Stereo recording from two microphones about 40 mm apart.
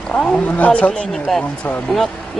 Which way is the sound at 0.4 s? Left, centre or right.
Left.